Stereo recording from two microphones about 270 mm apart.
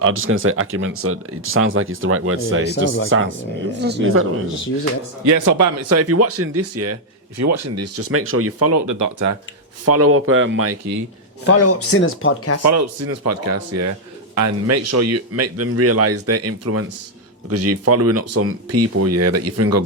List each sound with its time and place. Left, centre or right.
0.0 s speech: right
5.2 s speech: right
9.8 s speech: right
11.4 s speech: left
12.6 s speech: right